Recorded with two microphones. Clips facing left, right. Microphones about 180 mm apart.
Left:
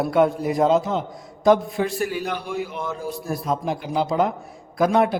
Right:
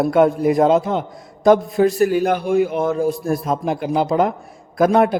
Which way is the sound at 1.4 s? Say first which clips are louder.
Right 5 dB; 45° right (ahead or behind).